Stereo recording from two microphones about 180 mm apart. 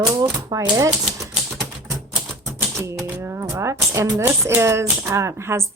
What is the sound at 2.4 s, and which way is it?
A woman's voice, 15° right (ahead or behind).